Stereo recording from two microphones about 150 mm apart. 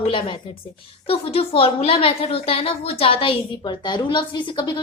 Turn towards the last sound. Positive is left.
turn(degrees=30)  # may be behind; listen again after turning